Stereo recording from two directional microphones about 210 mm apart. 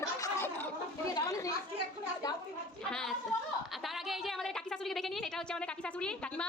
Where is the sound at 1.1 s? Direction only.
15° left (ahead or behind).